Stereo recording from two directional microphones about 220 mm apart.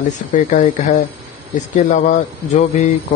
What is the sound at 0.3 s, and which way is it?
Speech, 35° left (ahead or behind).